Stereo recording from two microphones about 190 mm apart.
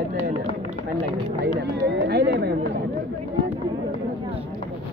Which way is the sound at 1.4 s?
60° right (ahead or behind).